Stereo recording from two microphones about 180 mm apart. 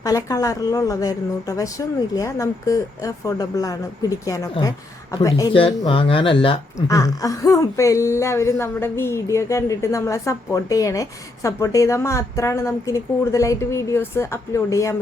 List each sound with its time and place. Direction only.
0.0 s speech: 20° left (ahead or behind)
5.5 s speech: 30° left (ahead or behind)
6.7 s speech: 15° left (ahead or behind)